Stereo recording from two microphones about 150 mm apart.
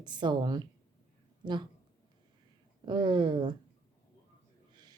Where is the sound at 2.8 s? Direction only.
30° right (ahead or behind).